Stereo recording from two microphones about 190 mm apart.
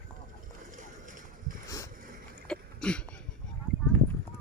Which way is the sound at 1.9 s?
45° right (ahead or behind).